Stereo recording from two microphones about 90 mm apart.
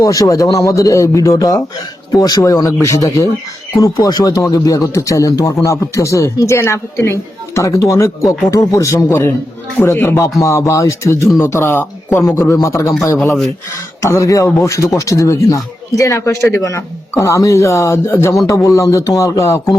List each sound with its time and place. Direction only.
0.0 s speech: 40° left (ahead or behind)
14.0 s speech: 35° left (ahead or behind)